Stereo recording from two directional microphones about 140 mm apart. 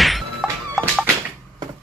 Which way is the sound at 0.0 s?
Centre (ahead or behind).